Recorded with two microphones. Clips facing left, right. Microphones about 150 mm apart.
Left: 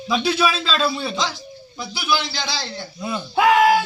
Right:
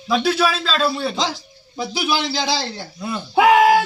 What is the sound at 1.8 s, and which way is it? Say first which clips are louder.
Speech: right 2 dB; 40° right (ahead or behind).